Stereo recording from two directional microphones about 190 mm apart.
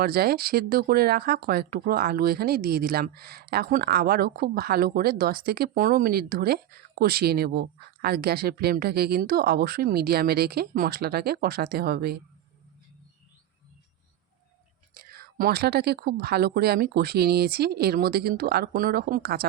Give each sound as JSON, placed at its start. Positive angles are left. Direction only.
{"t": 0.0, "sound": "speech", "side_deg": -55}
{"t": 14.9, "sound": "speech", "side_deg": -50}